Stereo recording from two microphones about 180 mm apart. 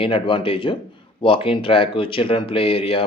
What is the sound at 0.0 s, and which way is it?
Speech, 30° left (ahead or behind).